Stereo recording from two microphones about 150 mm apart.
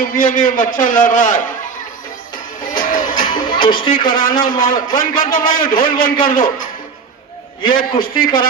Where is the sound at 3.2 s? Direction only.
30° left (ahead or behind).